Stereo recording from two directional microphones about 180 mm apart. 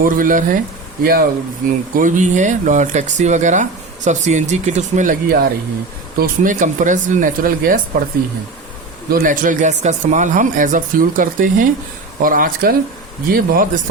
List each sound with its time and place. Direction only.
0.0 s speech: 50° right (ahead or behind)
2.0 s speech: 45° right (ahead or behind)
9.0 s speech: 50° right (ahead or behind)